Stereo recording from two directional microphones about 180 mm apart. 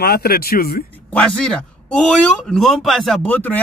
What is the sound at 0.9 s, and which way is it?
A man's voice, 10° left (ahead or behind).